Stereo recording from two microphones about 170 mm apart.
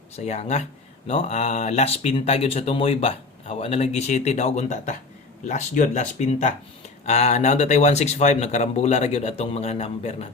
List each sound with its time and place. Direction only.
0.3 s speech: 40° left (ahead or behind)